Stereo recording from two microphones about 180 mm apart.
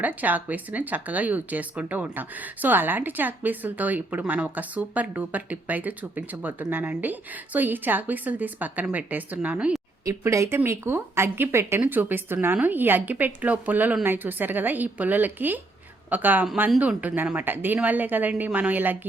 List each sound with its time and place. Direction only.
0.0 s speech: 10° right (ahead or behind)